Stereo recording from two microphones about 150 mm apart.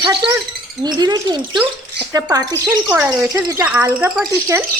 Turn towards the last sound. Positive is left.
turn(degrees=-10)  # may be behind; listen again after turning